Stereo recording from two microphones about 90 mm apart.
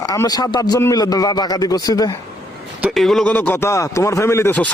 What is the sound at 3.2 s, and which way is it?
Speech, 15° left (ahead or behind).